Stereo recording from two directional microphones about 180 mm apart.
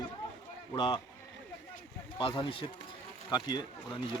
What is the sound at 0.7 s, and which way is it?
Speech, 25° left (ahead or behind).